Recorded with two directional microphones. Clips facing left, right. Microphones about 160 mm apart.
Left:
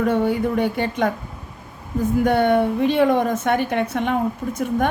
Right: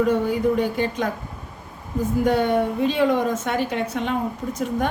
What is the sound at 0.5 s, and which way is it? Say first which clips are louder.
Speech: left 1 dB; 60° left (ahead or behind).